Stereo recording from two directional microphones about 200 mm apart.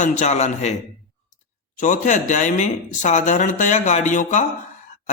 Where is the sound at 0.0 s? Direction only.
35° left (ahead or behind).